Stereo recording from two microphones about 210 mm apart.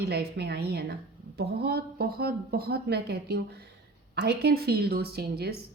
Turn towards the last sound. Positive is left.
turn(degrees=-50)  # may be behind; listen again after turning